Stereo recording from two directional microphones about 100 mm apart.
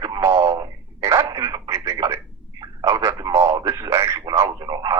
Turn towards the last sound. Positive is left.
turn(degrees=-40)  # may be behind; listen again after turning